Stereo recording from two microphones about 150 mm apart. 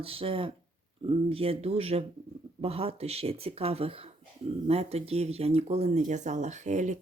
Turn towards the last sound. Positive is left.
turn(degrees=-50)  # may be behind; listen again after turning